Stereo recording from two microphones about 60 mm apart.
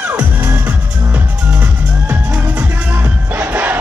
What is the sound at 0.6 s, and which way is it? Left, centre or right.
Music, right.